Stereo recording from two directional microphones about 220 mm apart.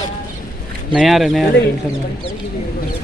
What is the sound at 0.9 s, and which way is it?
Speech, centre (ahead or behind).